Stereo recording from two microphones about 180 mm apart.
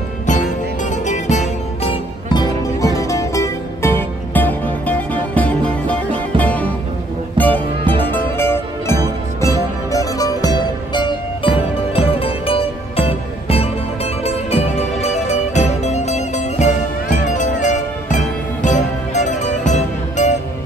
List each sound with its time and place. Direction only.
0.3 s music: 40° left (ahead or behind)
2.8 s music: 20° left (ahead or behind); by 20.3 s 40° left (ahead or behind)